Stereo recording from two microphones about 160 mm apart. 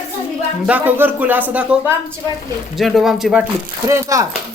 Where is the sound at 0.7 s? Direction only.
10° right (ahead or behind).